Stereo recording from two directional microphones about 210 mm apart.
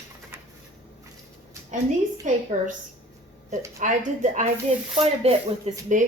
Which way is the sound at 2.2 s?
40° right (ahead or behind).